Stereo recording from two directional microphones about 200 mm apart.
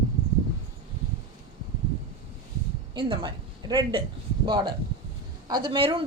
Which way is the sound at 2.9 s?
25° right (ahead or behind).